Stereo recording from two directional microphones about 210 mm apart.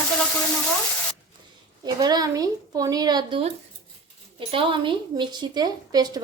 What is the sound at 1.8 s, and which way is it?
A woman's voice, 20° right (ahead or behind).